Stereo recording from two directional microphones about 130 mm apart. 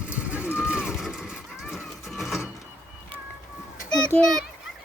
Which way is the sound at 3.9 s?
5° left (ahead or behind).